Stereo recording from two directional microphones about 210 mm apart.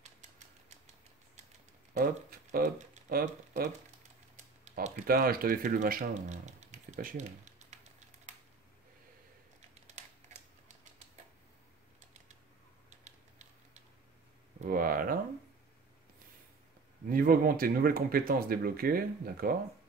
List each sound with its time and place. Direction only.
2.5 s speech: 35° right (ahead or behind)
12.9 s tick-tock: 35° right (ahead or behind)
14.6 s a sound: 45° right (ahead or behind)
17.1 s speech: 45° right (ahead or behind)